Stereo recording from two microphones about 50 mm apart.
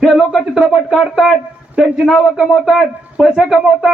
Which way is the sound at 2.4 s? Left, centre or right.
Centre.